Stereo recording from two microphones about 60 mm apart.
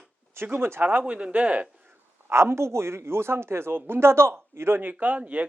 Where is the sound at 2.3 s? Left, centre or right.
Right.